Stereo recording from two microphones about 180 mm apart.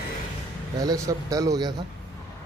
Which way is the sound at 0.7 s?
20° right (ahead or behind).